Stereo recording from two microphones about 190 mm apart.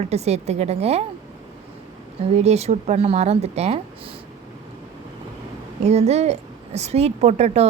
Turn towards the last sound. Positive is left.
turn(degrees=-35)  # may be behind; listen again after turning